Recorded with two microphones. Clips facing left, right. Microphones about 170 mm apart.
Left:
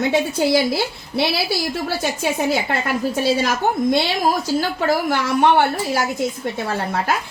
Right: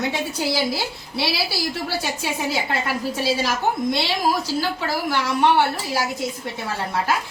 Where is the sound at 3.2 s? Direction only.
50° left (ahead or behind).